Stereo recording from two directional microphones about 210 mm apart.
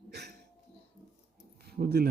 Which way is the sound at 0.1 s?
50° right (ahead or behind).